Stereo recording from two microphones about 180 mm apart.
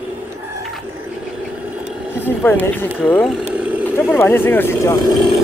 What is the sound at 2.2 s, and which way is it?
Speech, 10° left (ahead or behind).